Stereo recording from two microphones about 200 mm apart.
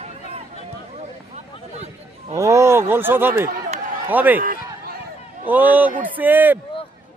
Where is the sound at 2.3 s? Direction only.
15° right (ahead or behind).